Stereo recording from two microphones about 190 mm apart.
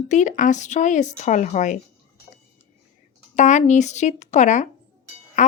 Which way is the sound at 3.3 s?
40° left (ahead or behind).